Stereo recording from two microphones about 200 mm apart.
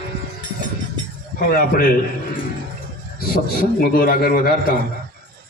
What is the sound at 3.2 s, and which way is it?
A man's voice, 50° left (ahead or behind).